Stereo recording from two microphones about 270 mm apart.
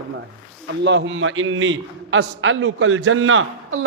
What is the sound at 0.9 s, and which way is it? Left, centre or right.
A man's voice, right.